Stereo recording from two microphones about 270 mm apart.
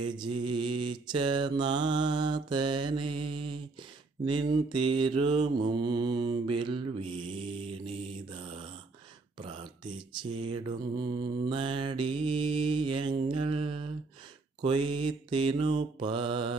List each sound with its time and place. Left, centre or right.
0.1 s mantra: centre
9.4 s a sound: centre
10.7 s mantra: centre